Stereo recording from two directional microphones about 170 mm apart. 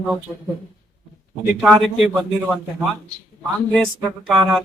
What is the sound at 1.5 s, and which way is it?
Speech, centre (ahead or behind).